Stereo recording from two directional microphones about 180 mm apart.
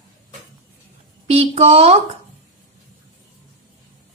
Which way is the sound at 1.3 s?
35° right (ahead or behind).